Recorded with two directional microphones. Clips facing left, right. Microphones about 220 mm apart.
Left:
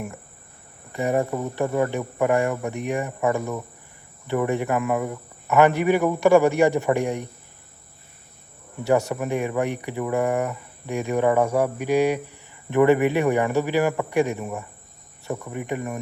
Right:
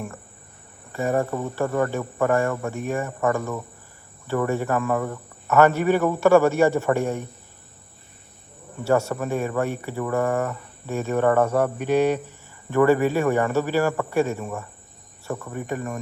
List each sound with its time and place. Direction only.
0.9 s speech: 15° left (ahead or behind)
8.8 s speech: 15° left (ahead or behind)